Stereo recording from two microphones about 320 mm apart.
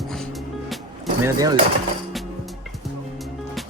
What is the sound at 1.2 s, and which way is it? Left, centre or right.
Speech, centre.